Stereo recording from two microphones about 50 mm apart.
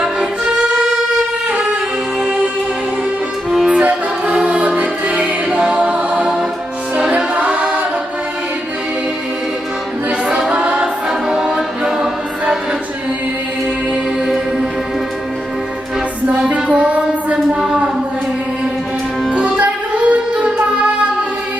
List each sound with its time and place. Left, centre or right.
0.8 s violin: centre
3.7 s music: right
7.3 s choir: right
10.5 s choir: right
11.3 s music: centre
14.3 s music: centre
16.5 s music: right
17.7 s a sound: centre
19.3 s music: right